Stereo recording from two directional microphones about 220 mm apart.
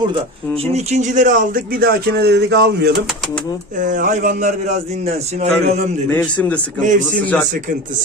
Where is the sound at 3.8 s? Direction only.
35° right (ahead or behind).